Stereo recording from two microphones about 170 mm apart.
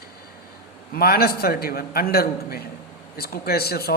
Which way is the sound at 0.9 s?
65° left (ahead or behind).